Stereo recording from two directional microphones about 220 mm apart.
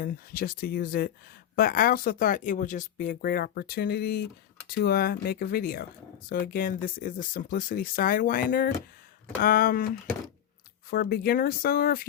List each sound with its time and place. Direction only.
0.0 s speech: 45° left (ahead or behind)
10.9 s speech: 45° left (ahead or behind)